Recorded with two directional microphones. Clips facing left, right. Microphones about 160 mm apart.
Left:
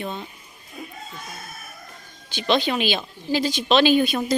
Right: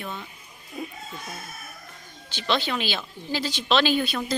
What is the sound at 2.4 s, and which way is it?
A woman's voice, 15° left (ahead or behind).